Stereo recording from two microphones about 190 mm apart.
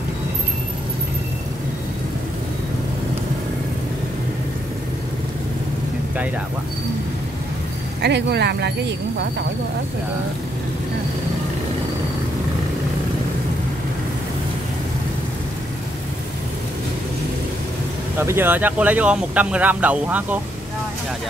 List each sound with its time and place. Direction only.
8.0 s speech: 60° right (ahead or behind)
18.2 s speech: 10° right (ahead or behind)